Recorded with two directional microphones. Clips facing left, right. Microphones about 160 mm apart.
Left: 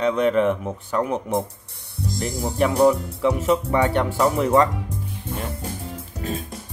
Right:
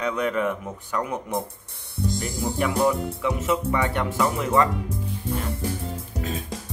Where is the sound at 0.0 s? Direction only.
25° left (ahead or behind).